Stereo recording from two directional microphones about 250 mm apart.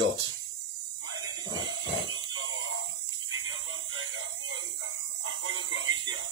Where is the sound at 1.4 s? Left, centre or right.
Centre.